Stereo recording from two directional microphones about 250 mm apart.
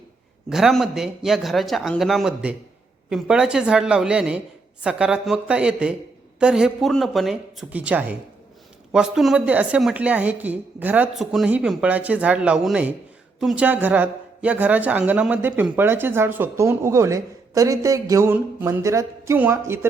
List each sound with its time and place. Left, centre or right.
0.5 s a woman's voice: centre